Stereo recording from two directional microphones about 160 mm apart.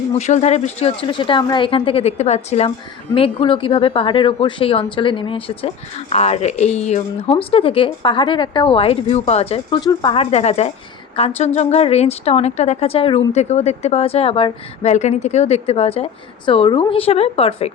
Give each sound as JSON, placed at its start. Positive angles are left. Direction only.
{"t": 0.2, "sound": "a woman's voice", "side_deg": 45}
{"t": 10.2, "sound": "a woman's voice", "side_deg": 40}
{"t": 14.8, "sound": "a woman's voice", "side_deg": 45}